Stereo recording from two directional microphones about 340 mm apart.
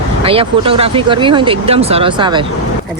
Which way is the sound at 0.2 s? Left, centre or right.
Centre.